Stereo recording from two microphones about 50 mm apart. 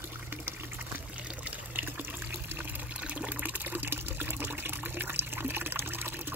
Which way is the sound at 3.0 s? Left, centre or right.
Right.